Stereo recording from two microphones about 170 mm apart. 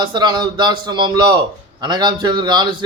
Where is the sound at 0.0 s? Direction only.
25° right (ahead or behind).